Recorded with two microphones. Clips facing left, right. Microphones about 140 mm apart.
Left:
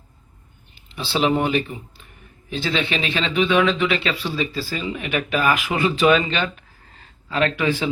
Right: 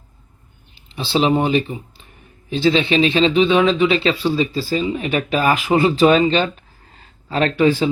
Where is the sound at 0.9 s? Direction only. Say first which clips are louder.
Right 3 dB; 25° right (ahead or behind).